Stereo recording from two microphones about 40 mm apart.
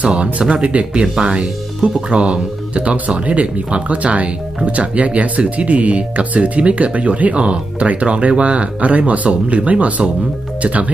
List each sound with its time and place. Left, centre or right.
0.0 s speech: right